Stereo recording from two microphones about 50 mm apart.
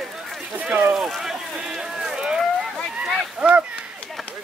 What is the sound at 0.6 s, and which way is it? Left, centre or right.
Speech, right.